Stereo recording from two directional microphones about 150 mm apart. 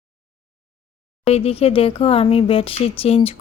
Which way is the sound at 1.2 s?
40° left (ahead or behind).